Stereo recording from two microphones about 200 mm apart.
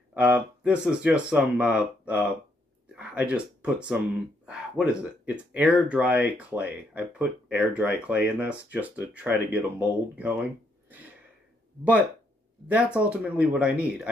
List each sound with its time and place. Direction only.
0.1 s speech: 10° right (ahead or behind)
12.6 s speech: 5° right (ahead or behind)